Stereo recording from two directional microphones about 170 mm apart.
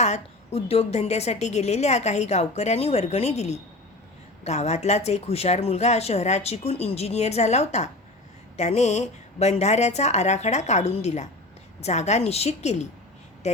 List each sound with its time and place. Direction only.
0.0 s a woman's voice: 40° left (ahead or behind)